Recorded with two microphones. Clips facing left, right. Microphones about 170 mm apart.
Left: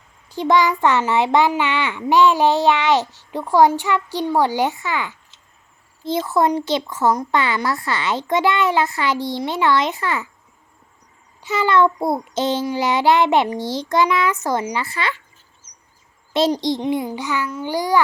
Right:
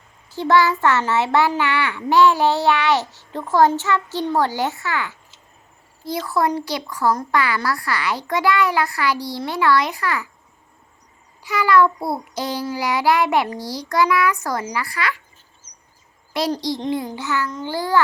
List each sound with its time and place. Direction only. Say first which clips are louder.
0.3 s a child's voice: even; 15° left (ahead or behind)
6.1 s child singing: left 3 dB; 20° left (ahead or behind)
11.4 s child singing: even; 25° left (ahead or behind)
16.3 s child singing: left 4 dB; 25° left (ahead or behind)
16.8 s a child's voice: left 2 dB; 15° left (ahead or behind)